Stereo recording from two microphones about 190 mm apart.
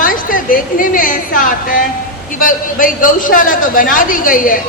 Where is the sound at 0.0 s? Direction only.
45° left (ahead or behind).